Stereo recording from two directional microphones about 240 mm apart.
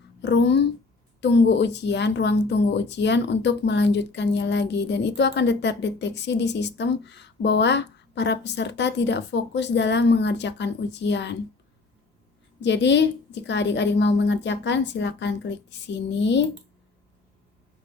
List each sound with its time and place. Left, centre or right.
0.2 s a woman's voice: left
12.5 s a woman's voice: left